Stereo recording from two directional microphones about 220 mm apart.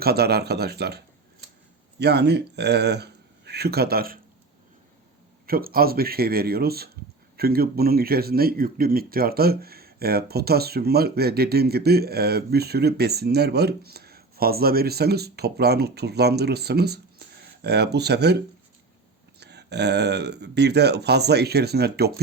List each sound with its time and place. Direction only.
0.0 s speech: 45° right (ahead or behind)
5.5 s speech: 40° right (ahead or behind)